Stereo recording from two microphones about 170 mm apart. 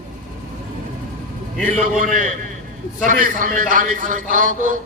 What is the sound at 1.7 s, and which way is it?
A man's voice, 50° right (ahead or behind).